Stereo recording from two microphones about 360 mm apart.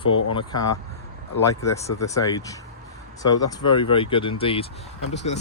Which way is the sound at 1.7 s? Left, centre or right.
Centre.